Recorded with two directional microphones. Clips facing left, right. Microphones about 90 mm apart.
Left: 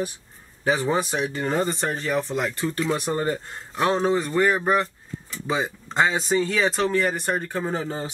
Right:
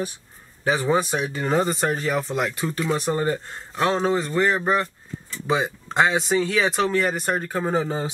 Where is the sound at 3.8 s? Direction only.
5° left (ahead or behind).